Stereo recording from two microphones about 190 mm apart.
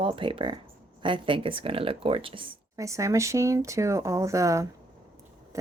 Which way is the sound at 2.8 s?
15° right (ahead or behind).